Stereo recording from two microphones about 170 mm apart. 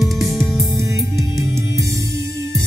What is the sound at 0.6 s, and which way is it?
Music, 15° right (ahead or behind).